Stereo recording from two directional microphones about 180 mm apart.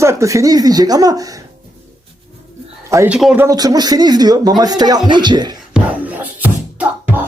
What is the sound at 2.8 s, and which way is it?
Speech, 15° right (ahead or behind).